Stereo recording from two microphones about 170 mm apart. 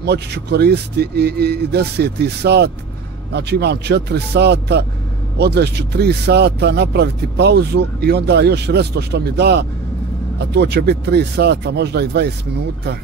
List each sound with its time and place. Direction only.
0.0 s speech: 75° right (ahead or behind)